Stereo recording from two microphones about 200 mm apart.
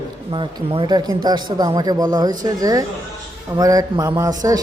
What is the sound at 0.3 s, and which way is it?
A man's voice, 25° right (ahead or behind).